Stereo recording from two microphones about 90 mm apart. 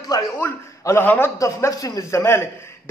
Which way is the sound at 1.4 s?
35° left (ahead or behind).